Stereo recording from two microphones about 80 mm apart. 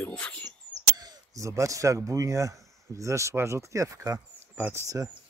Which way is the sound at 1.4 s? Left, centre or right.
Right.